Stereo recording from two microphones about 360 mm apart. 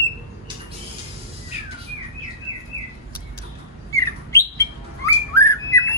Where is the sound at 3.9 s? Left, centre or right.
Centre.